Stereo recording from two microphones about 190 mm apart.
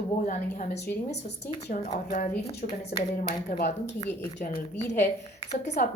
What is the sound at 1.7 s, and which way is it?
A woman's voice, 40° left (ahead or behind).